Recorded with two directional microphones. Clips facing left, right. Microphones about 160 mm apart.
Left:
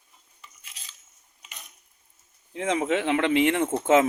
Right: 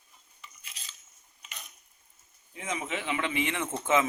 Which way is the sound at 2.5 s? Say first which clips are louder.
Left 10 dB; 75° left (ahead or behind).